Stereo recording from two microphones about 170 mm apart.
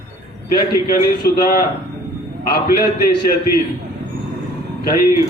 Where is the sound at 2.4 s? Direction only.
65° left (ahead or behind).